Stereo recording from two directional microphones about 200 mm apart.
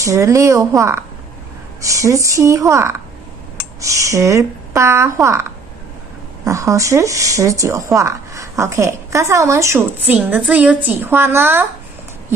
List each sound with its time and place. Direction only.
0.0 s a woman's voice: 15° right (ahead or behind)